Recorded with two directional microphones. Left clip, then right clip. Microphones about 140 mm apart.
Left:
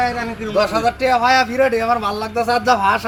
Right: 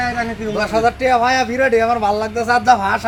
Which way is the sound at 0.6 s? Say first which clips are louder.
Right 3 dB; 10° right (ahead or behind).